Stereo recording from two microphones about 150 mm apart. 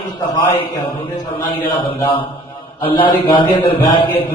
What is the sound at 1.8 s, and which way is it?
A man's voice, 35° left (ahead or behind).